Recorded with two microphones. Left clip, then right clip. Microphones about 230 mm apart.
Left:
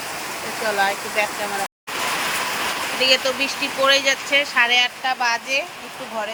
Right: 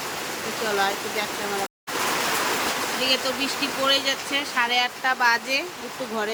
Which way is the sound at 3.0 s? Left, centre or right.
Centre.